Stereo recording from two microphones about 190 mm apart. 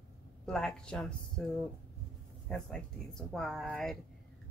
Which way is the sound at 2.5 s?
5° left (ahead or behind).